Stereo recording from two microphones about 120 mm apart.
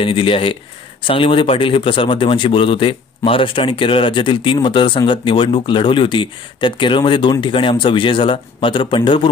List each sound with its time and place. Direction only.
0.0 s speech: 50° left (ahead or behind)